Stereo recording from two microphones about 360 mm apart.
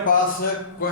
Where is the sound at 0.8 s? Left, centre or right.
Left.